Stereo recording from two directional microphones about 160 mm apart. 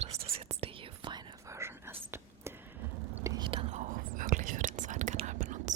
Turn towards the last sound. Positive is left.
turn(degrees=-50)  # may be behind; listen again after turning